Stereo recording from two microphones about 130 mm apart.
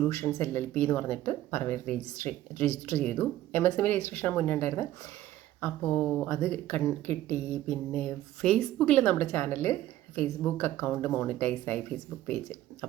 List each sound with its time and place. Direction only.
0.1 s speech: 25° left (ahead or behind)